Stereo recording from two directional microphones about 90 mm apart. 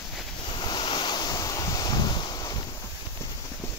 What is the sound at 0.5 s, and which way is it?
Waves, 60° left (ahead or behind).